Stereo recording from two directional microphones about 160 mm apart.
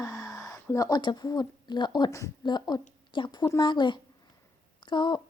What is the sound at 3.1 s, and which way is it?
Speech, 30° left (ahead or behind).